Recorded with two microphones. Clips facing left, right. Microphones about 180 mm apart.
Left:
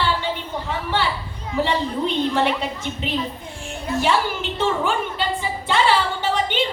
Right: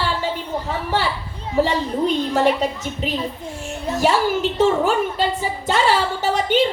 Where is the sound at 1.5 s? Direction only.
40° right (ahead or behind).